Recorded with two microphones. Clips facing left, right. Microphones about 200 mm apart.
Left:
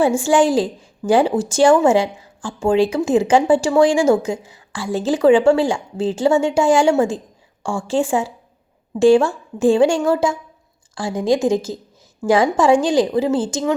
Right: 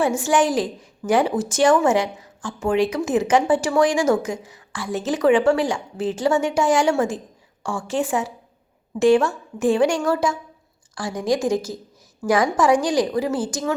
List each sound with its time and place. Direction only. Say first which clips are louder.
0.0 s a woman's voice: left 4 dB; 30° left (ahead or behind)